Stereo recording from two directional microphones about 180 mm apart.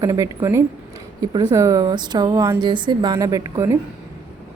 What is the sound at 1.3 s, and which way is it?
Speech, 20° right (ahead or behind).